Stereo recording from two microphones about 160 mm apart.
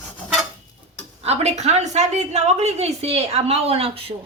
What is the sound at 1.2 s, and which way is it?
A woman's voice, 45° right (ahead or behind).